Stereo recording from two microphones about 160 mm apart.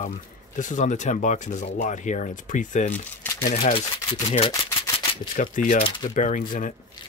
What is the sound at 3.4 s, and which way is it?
Speech, 60° left (ahead or behind).